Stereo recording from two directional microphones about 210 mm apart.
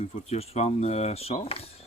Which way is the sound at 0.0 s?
30° left (ahead or behind).